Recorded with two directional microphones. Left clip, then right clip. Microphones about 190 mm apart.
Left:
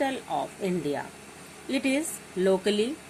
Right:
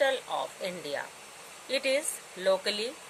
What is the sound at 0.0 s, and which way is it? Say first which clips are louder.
A woman's voice: right 1 dB; 20° right (ahead or behind).